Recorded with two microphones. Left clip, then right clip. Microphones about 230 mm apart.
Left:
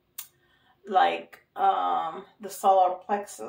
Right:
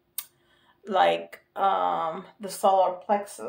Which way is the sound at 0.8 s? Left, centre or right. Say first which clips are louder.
Right 1 dB; right.